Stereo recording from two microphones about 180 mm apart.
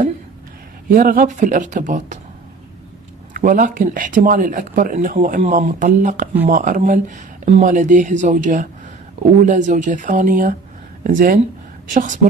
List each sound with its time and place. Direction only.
0.9 s speech: 50° right (ahead or behind)
3.3 s speech: 50° right (ahead or behind)